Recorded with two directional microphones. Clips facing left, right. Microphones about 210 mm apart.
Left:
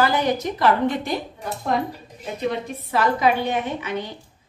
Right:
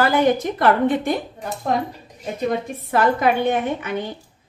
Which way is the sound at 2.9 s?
50° right (ahead or behind).